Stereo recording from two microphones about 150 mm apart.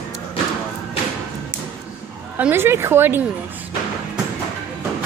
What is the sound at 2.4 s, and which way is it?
Speech, 15° right (ahead or behind).